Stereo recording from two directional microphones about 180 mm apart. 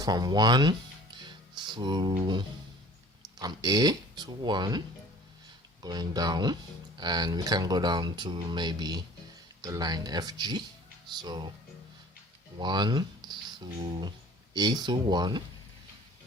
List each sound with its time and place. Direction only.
0.0 s speech: 20° right (ahead or behind)
5.8 s speech: 20° right (ahead or behind)
12.5 s speech: 25° right (ahead or behind)